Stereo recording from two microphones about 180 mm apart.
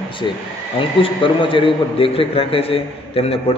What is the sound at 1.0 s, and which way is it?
A man's voice, 30° left (ahead or behind).